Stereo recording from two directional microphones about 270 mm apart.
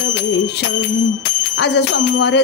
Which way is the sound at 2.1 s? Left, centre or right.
Left.